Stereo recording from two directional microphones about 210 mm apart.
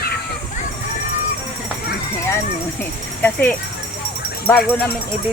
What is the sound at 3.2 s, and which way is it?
Speech, 10° left (ahead or behind).